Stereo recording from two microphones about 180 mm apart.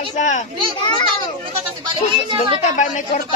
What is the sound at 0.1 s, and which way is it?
Speech, 40° left (ahead or behind).